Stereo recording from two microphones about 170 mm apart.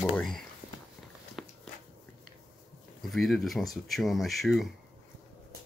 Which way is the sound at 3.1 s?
Centre (ahead or behind).